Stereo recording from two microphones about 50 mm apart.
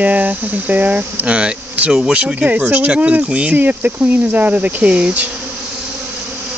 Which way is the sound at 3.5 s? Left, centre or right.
Right.